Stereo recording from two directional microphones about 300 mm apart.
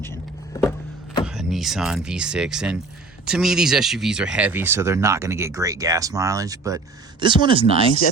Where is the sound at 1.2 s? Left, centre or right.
Centre.